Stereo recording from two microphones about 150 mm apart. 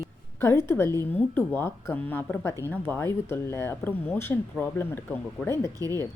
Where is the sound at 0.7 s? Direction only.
15° left (ahead or behind).